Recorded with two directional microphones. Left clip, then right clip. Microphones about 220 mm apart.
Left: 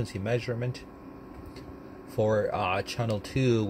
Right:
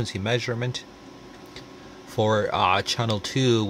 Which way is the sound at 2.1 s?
25° right (ahead or behind).